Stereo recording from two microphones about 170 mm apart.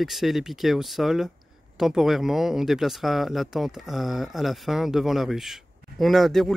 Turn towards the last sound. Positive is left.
turn(degrees=0)  # may be behind; listen again after turning